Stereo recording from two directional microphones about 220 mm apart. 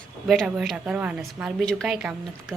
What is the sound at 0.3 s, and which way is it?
A woman's voice, centre (ahead or behind).